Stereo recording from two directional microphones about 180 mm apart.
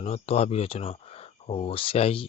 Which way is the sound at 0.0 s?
35° left (ahead or behind).